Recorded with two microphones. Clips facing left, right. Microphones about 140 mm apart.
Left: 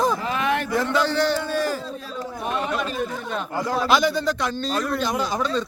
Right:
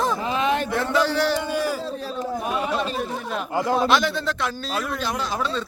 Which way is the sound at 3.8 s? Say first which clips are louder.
Left 1 dB; centre (ahead or behind).